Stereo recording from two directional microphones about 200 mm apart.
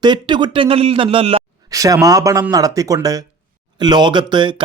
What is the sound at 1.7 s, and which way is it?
Speech, 15° right (ahead or behind).